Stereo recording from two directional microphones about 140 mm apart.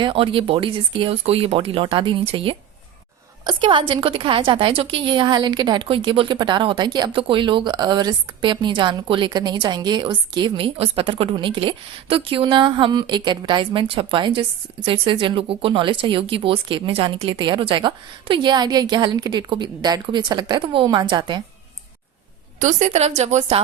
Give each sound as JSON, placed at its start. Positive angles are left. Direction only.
{"t": 0.0, "sound": "a woman's voice", "side_deg": -40}
{"t": 22.6, "sound": "a woman's voice", "side_deg": -50}